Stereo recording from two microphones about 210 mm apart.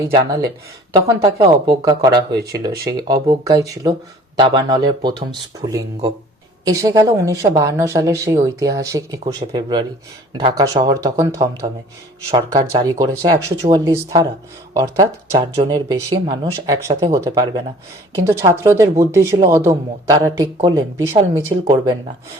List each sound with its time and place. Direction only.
0.9 s speech: 20° right (ahead or behind)
12.3 s speech: 20° right (ahead or behind)
21.6 s speech: 25° right (ahead or behind)